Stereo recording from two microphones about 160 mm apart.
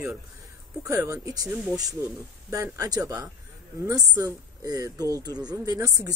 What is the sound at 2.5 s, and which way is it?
A woman's voice, 20° right (ahead or behind).